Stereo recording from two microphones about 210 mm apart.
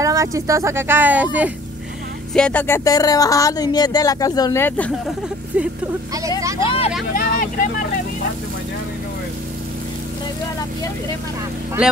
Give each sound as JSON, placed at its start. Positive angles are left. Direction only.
{"t": 0.0, "sound": "speech", "side_deg": -15}
{"t": 2.3, "sound": "speech", "side_deg": 5}
{"t": 6.6, "sound": "speech", "side_deg": 25}
{"t": 7.2, "sound": "vehicle", "side_deg": 40}